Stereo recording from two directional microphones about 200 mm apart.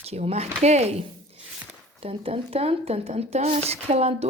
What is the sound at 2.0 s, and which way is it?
Speech, 30° right (ahead or behind).